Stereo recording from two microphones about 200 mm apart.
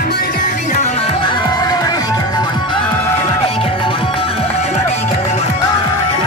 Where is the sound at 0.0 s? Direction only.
45° left (ahead or behind).